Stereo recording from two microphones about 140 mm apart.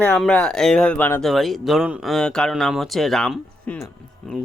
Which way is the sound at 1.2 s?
Centre (ahead or behind).